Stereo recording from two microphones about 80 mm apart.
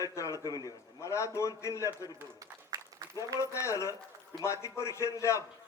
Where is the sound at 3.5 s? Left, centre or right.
Left.